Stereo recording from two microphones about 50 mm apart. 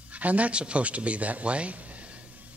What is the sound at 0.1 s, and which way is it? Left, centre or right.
A man's voice, right.